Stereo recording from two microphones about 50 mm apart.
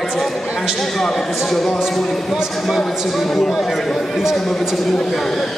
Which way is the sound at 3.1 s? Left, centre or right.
Centre.